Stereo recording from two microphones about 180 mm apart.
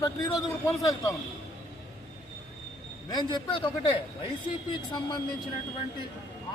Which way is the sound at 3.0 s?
25° left (ahead or behind).